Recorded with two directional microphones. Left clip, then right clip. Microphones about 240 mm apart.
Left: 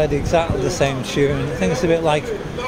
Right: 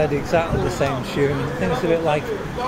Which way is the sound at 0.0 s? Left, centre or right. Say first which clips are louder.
Left 2 dB; centre.